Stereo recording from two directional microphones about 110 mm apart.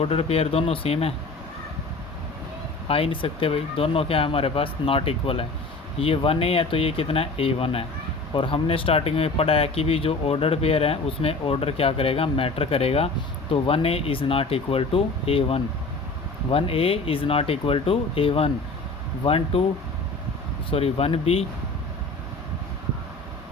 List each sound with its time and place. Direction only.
0.0 s speech: 65° left (ahead or behind)
2.8 s speech: 60° left (ahead or behind)
20.7 s speech: 60° left (ahead or behind)